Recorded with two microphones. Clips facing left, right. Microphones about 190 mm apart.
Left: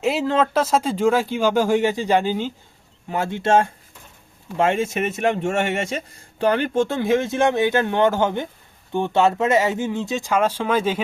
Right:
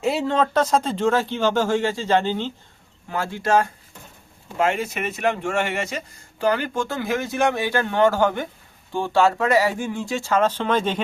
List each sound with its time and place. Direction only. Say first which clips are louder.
0.0 s speech: left 1 dB; centre (ahead or behind)
3.1 s speech: left 2 dB; 20° left (ahead or behind)